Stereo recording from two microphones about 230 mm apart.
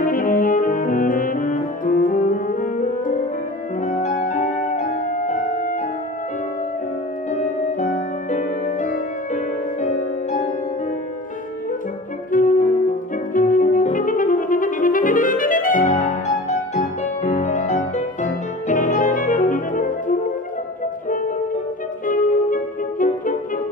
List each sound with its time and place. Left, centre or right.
0.0 s brass instrument: left
3.8 s music: left
7.8 s music: left
12.3 s music: left
22.0 s music: left